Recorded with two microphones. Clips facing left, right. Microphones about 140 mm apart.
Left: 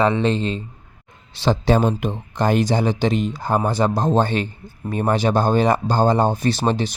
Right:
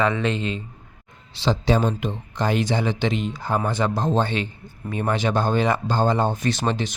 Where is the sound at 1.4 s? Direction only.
50° left (ahead or behind).